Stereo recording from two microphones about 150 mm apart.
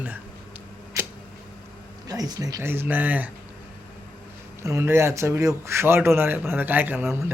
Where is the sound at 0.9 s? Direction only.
20° right (ahead or behind).